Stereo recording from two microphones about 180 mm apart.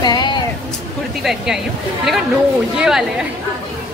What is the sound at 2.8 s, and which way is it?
Speech, 5° right (ahead or behind).